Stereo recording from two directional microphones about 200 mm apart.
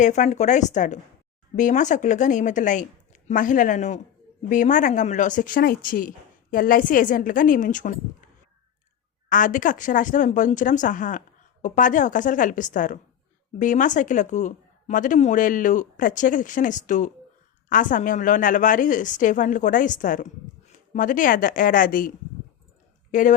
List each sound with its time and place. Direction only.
0.0 s a woman's voice: 35° left (ahead or behind)
9.3 s a woman's voice: 40° left (ahead or behind)
23.1 s a woman's voice: 40° left (ahead or behind)